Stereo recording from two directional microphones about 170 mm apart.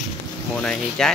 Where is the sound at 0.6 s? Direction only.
5° left (ahead or behind).